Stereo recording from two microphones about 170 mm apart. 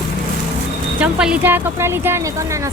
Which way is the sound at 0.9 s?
5° right (ahead or behind).